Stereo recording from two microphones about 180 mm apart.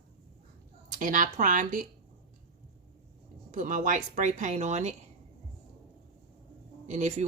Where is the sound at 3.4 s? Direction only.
45° right (ahead or behind).